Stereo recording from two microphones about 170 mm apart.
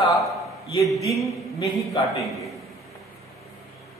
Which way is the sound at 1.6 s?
20° left (ahead or behind).